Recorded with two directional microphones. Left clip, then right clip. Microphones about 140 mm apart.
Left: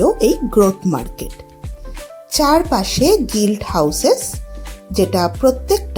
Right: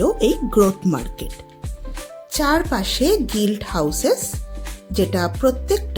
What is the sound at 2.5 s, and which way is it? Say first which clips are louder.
A woman's voice: left 5 dB; 5° left (ahead or behind).